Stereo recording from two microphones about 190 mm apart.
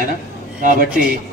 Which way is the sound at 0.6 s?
45° right (ahead or behind).